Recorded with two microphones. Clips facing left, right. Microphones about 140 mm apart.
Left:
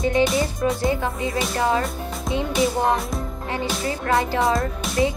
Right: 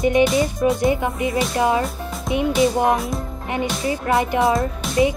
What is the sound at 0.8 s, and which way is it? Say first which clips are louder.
Speech: right 3 dB; 20° right (ahead or behind).